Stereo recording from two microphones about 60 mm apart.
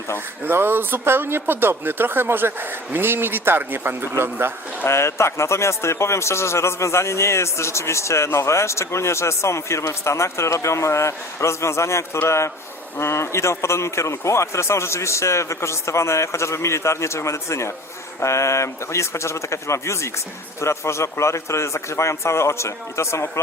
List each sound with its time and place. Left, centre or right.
0.4 s speech: right
4.9 s a man's voice: left